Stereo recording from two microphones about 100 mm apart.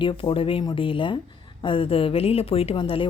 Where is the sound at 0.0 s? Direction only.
55° left (ahead or behind).